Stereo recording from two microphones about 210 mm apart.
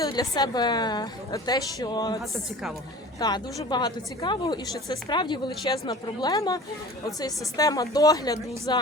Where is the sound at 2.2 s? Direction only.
Centre (ahead or behind).